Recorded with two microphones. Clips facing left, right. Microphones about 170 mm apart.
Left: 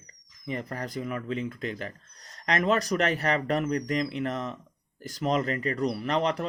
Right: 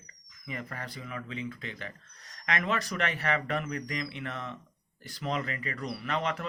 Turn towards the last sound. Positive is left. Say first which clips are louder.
# left 5 dB
turn(degrees=40)  # may be behind; listen again after turning